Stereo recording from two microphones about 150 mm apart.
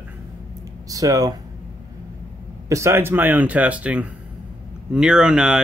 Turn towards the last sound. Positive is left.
turn(degrees=-5)  # may be behind; listen again after turning